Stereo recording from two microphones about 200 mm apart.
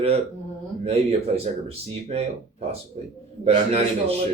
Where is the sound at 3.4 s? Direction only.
30° right (ahead or behind).